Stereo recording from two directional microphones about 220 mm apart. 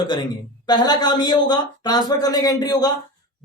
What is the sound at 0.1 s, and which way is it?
Speech, 20° left (ahead or behind).